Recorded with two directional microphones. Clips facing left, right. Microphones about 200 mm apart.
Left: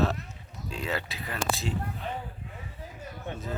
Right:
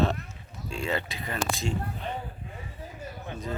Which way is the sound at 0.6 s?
5° left (ahead or behind).